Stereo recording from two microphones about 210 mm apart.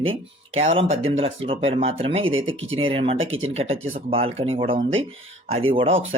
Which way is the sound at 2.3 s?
70° right (ahead or behind).